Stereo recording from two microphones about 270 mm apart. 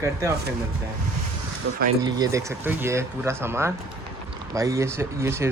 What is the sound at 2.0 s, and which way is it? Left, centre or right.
Speech, centre.